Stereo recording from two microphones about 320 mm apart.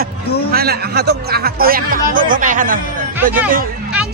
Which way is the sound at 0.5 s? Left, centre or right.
Right.